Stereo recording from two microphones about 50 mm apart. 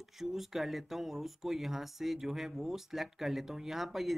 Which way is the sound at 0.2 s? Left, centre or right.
Centre.